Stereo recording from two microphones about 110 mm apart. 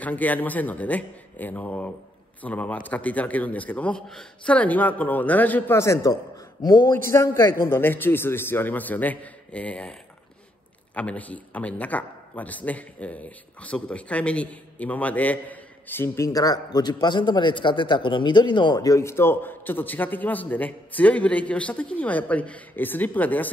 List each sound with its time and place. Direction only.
0.0 s a man's voice: 15° left (ahead or behind)
6.6 s a man's voice: 40° left (ahead or behind)
6.9 s a man's voice: 25° left (ahead or behind)
11.0 s a man's voice: 15° left (ahead or behind)